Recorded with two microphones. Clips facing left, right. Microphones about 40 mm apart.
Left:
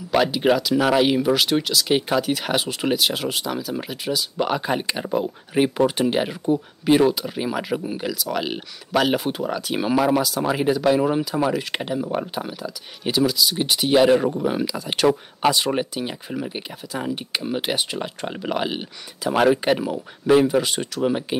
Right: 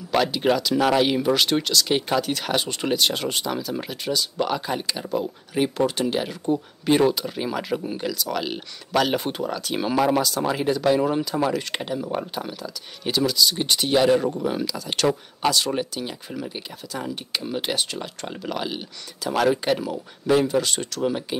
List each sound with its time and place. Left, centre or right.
0.1 s speech: centre
6.4 s speech: centre